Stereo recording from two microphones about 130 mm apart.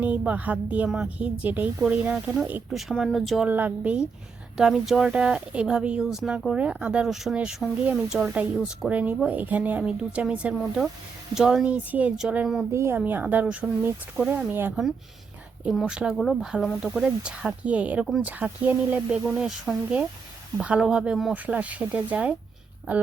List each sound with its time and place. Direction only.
0.0 s speech: 10° right (ahead or behind)
3.5 s speech: 10° right (ahead or behind)
12.7 s speech: 20° right (ahead or behind)
15.7 s speech: 5° right (ahead or behind)